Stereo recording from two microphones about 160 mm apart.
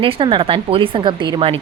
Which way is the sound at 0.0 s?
35° right (ahead or behind).